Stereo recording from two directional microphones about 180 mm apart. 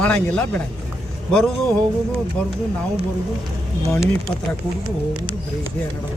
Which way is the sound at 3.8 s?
15° left (ahead or behind).